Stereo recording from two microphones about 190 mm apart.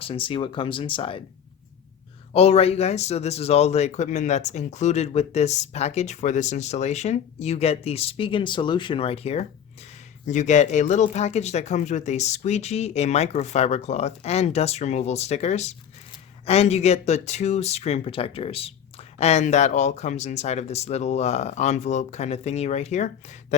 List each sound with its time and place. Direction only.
0.0 s speech: 30° left (ahead or behind)
2.3 s speech: 30° left (ahead or behind)